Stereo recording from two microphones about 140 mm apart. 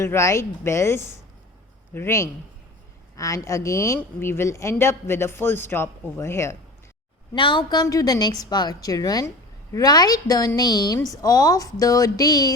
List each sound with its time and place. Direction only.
0.0 s a woman's voice: 20° left (ahead or behind)
7.3 s a woman's voice: 35° left (ahead or behind)